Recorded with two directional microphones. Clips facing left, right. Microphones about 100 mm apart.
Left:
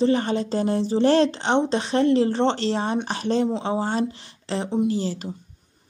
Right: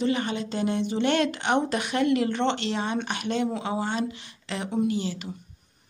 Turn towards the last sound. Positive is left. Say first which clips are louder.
# left 3 dB
turn(degrees=40)  # may be behind; listen again after turning